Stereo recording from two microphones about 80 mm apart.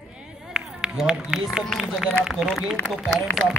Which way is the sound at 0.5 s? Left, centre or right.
Centre.